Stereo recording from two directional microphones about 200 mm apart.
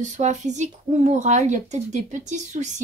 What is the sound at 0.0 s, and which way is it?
A woman's voice, 35° right (ahead or behind).